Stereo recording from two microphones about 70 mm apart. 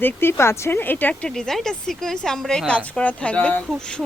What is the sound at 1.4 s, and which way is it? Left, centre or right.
A woman's voice, centre.